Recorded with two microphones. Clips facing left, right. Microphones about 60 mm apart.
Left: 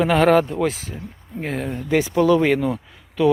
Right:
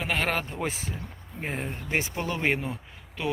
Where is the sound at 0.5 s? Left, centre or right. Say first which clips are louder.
Left 9 dB; left.